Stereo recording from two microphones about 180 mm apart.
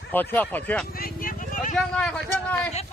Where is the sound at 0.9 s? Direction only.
55° left (ahead or behind).